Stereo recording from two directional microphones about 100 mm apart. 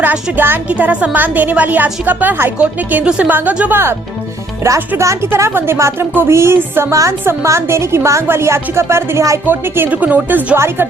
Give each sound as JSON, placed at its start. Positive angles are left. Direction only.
{"t": 0.3, "sound": "speech", "side_deg": -20}
{"t": 4.9, "sound": "speech", "side_deg": -25}